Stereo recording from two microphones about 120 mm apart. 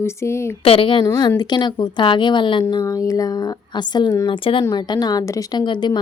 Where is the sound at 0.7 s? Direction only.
45° left (ahead or behind).